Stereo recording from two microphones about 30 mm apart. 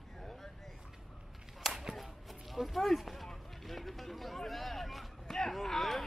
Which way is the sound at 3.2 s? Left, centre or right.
Centre.